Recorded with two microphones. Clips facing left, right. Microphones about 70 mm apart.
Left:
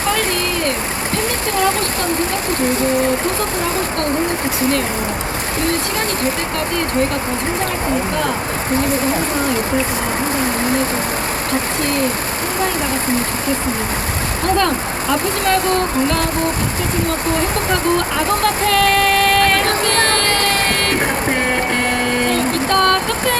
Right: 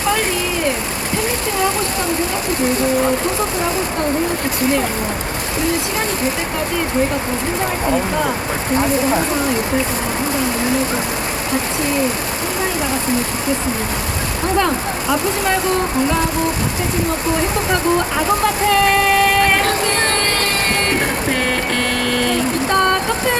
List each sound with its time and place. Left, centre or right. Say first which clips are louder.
18.4 s music: even; centre
22.0 s vehicle: left 1 dB; left
22.7 s a sound: left 1 dB; centre